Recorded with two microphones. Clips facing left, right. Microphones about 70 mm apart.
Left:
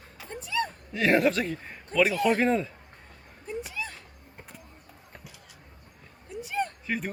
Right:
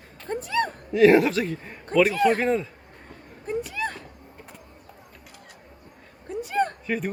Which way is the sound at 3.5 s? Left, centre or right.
Right.